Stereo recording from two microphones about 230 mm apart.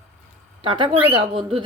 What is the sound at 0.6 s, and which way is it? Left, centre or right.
Speech, right.